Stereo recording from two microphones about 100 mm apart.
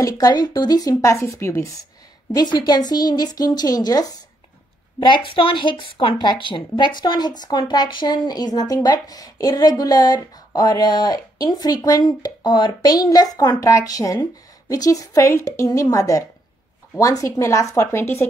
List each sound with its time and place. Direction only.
0.0 s a woman's voice: 40° left (ahead or behind)
2.3 s a woman's voice: 45° left (ahead or behind)
5.0 s a woman's voice: 55° left (ahead or behind); by 18.2 s 25° left (ahead or behind)